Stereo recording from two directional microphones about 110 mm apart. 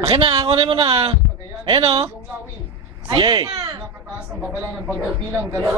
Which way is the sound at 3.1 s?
40° right (ahead or behind).